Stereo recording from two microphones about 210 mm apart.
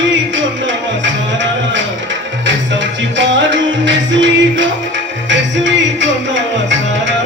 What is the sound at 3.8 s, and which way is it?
Music, 60° right (ahead or behind).